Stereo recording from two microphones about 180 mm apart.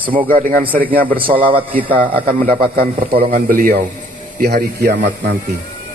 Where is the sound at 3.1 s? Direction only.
55° right (ahead or behind).